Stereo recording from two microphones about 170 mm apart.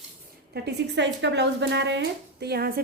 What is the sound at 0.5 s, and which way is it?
Speech, 75° right (ahead or behind).